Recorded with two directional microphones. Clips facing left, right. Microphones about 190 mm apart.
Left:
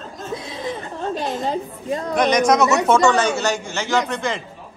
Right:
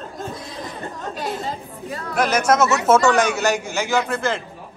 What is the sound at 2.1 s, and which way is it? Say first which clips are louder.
A man's voice: left 1 dB; 5° right (ahead or behind).